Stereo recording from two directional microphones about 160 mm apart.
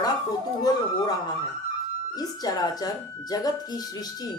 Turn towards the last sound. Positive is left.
turn(degrees=25)  # may be behind; listen again after turning